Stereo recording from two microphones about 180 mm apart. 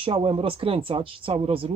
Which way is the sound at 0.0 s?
30° right (ahead or behind).